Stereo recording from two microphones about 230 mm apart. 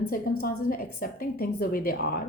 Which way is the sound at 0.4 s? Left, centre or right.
Left.